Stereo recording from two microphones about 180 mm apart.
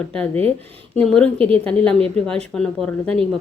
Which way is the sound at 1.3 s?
30° right (ahead or behind).